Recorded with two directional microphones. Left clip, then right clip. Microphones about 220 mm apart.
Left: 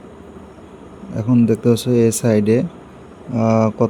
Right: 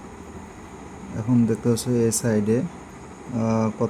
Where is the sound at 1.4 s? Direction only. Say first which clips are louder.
Left 7 dB; 15° left (ahead or behind).